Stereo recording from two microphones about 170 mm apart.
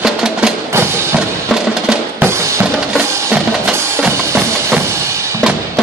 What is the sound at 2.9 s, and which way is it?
Drum, 10° right (ahead or behind).